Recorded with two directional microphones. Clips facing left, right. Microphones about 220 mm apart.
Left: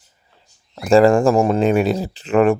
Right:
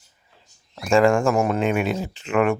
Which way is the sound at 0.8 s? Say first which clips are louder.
Left 5 dB; 35° left (ahead or behind).